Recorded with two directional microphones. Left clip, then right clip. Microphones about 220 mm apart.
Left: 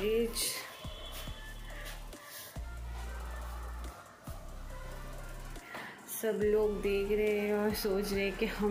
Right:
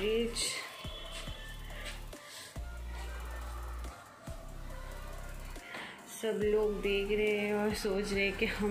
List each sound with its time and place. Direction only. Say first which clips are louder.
0.0 s music: left 1 dB; 5° left (ahead or behind)
6.2 s music: left 1 dB; 10° left (ahead or behind)